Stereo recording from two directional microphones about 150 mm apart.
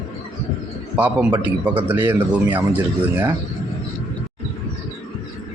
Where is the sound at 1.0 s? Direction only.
15° right (ahead or behind).